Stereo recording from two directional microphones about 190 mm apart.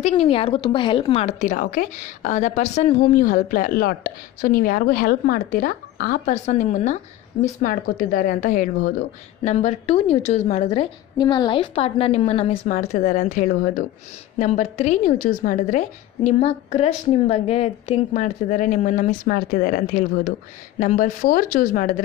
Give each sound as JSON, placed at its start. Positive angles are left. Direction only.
{"t": 0.1, "sound": "a woman's voice", "side_deg": 30}
{"t": 3.1, "sound": "a woman's voice", "side_deg": 45}
{"t": 13.5, "sound": "speech", "side_deg": 50}
{"t": 14.4, "sound": "a woman's voice", "side_deg": 30}